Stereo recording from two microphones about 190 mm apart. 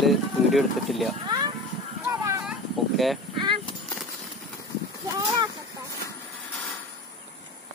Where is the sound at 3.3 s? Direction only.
25° right (ahead or behind).